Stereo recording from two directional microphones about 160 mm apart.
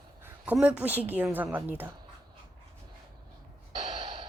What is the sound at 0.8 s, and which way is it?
A woman's voice, 10° right (ahead or behind).